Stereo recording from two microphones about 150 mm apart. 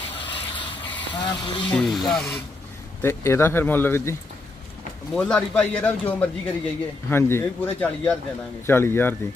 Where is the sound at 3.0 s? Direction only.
15° left (ahead or behind).